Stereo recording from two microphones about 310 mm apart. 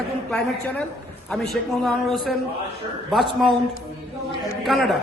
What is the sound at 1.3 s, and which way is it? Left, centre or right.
A man's voice, centre.